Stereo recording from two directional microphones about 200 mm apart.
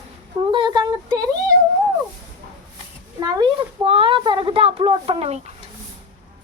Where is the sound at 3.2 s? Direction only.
20° right (ahead or behind).